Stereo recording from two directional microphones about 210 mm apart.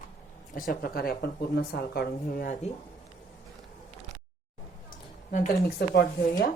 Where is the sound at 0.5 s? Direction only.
40° left (ahead or behind).